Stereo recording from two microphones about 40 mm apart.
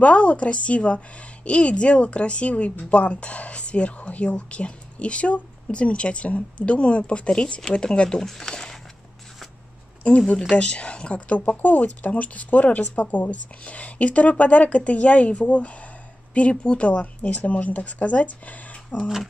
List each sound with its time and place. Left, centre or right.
0.0 s speech: left
8.2 s speech: centre
10.0 s speech: left
11.3 s speech: left